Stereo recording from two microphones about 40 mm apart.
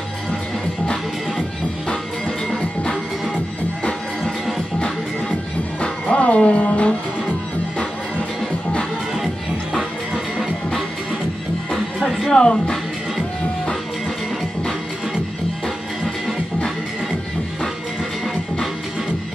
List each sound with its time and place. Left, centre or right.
5.8 s music: left
12.3 s music: centre